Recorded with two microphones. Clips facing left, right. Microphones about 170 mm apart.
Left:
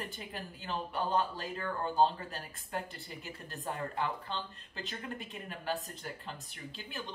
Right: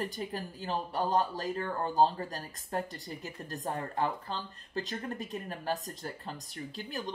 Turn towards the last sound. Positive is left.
turn(degrees=-40)  # may be behind; listen again after turning